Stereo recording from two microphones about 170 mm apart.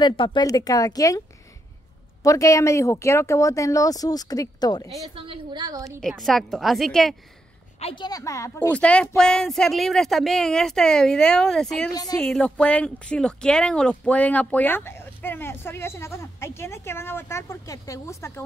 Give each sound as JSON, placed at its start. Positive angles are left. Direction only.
{"t": 0.0, "sound": "a woman's voice", "side_deg": 30}
{"t": 2.2, "sound": "a woman's voice", "side_deg": 20}
{"t": 5.1, "sound": "a woman's voice", "side_deg": -30}
{"t": 5.9, "sound": "speech", "side_deg": 0}
{"t": 7.8, "sound": "speech", "side_deg": 25}
{"t": 11.9, "sound": "a woman's voice", "side_deg": 20}
{"t": 12.2, "sound": "speech", "side_deg": 5}